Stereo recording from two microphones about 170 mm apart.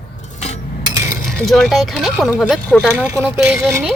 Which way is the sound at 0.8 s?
20° right (ahead or behind).